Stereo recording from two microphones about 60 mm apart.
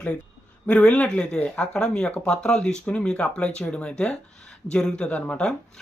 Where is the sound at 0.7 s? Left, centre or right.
Left.